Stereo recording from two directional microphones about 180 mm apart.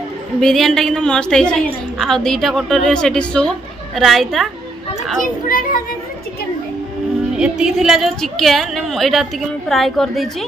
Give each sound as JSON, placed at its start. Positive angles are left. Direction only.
{"t": 0.4, "sound": "a woman's voice", "side_deg": 0}
{"t": 5.5, "sound": "speech", "side_deg": 50}
{"t": 7.3, "sound": "a woman's voice", "side_deg": -5}